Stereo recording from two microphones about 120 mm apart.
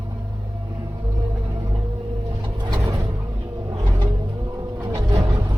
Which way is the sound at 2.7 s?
35° right (ahead or behind).